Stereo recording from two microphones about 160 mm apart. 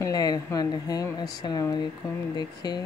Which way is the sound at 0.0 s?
25° left (ahead or behind).